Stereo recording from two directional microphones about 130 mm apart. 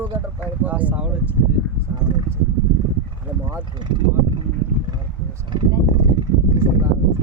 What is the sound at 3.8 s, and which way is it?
Speech, 35° right (ahead or behind).